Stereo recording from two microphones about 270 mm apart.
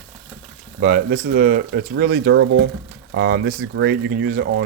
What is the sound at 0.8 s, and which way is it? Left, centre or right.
Speech, right.